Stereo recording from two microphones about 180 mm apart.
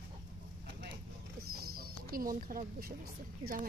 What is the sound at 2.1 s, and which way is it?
Speech, 50° right (ahead or behind).